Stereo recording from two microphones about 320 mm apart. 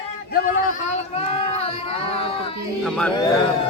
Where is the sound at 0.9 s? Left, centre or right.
Centre.